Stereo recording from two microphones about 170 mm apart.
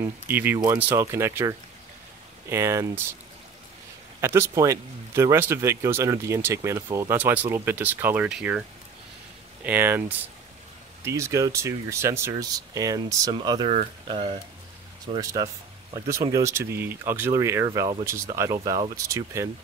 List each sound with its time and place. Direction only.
0.0 s speech: 10° right (ahead or behind)
2.5 s speech: 15° right (ahead or behind)
4.2 s speech: 15° right (ahead or behind); by 14.3 s 30° right (ahead or behind)
16.1 s speech: 20° right (ahead or behind)
17.6 s speech: 25° right (ahead or behind)
18.0 s speech: 15° right (ahead or behind)